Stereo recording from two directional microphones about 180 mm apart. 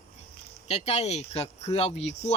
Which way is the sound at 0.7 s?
35° left (ahead or behind).